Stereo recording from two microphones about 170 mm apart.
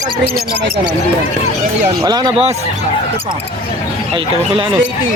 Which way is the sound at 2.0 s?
25° right (ahead or behind).